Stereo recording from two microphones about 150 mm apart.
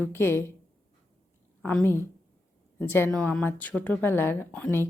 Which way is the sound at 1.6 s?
15° left (ahead or behind).